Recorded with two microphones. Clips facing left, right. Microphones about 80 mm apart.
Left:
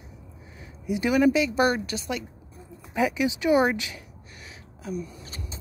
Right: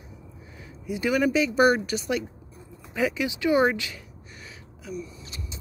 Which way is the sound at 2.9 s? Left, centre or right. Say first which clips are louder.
Left 2 dB; centre.